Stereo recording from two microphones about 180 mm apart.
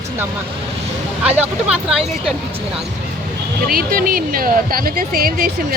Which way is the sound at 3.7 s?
55° right (ahead or behind).